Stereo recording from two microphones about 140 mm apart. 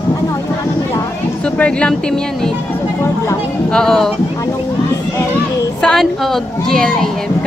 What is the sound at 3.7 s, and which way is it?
Speech, 5° left (ahead or behind).